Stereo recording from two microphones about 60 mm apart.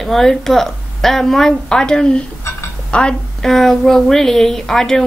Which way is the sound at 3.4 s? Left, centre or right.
Centre.